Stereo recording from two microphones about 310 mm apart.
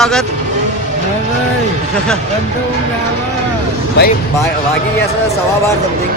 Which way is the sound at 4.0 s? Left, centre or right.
Left.